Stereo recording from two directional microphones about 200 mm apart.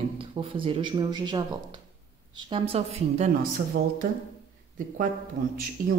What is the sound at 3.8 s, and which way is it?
Speech, 55° right (ahead or behind).